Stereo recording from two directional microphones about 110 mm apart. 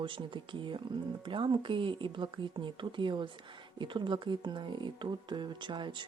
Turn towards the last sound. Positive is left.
turn(degrees=-45)  # may be behind; listen again after turning